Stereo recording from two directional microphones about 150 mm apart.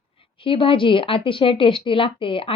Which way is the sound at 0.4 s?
35° left (ahead or behind).